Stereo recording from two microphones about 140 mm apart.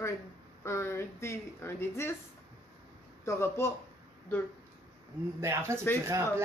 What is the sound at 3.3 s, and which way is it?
Speech, 20° left (ahead or behind).